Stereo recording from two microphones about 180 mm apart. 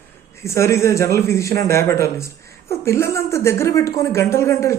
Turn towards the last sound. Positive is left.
turn(degrees=15)  # may be behind; listen again after turning